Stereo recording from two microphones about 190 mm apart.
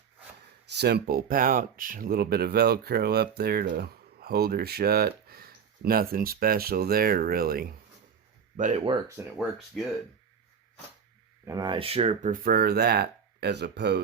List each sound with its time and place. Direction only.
0.8 s speech: 60° right (ahead or behind)
8.5 s speech: 40° right (ahead or behind)
8.8 s speech: 25° right (ahead or behind)
11.4 s speech: 20° right (ahead or behind); by 14.0 s 65° right (ahead or behind)